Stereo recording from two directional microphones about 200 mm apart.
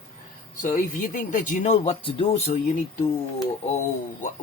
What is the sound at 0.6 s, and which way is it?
Speech, 40° left (ahead or behind).